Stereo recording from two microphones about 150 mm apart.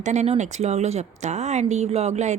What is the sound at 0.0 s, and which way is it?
Speech, 50° right (ahead or behind).